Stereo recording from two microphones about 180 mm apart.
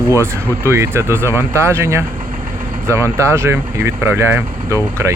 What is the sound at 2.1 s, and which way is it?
Engine, 30° right (ahead or behind).